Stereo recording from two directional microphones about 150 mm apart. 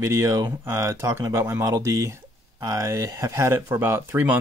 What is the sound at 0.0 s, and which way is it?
Speech, 20° right (ahead or behind).